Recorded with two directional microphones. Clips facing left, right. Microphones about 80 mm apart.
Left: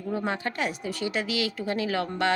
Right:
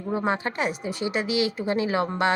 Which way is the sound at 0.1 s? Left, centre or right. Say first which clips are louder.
Right 4 dB; right.